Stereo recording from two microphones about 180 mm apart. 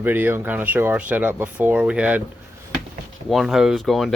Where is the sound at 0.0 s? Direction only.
10° right (ahead or behind).